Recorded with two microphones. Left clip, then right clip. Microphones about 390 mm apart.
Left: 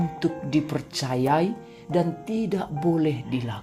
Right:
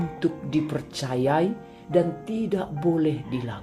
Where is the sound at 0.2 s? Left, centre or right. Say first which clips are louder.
Even; centre.